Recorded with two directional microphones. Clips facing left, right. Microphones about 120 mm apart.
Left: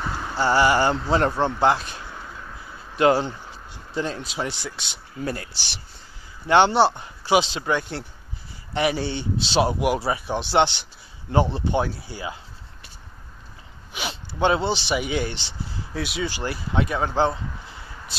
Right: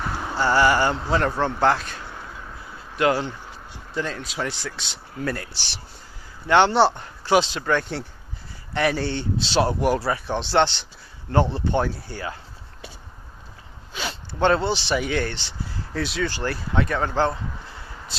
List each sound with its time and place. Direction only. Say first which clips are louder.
0.0 s a sound: right 1 dB; 5° right (ahead or behind)
0.4 s speech: even; 20° left (ahead or behind)
3.0 s speech: left 3 dB; 30° left (ahead or behind); by 12.4 s 10° left (ahead or behind)
13.9 s speech: right 1 dB; 15° left (ahead or behind)